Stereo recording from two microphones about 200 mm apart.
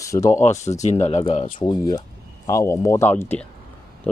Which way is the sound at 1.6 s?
20° left (ahead or behind).